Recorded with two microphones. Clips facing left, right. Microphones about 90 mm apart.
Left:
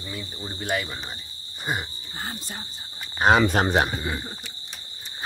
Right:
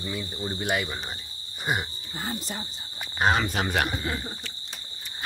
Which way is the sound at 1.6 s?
5° right (ahead or behind).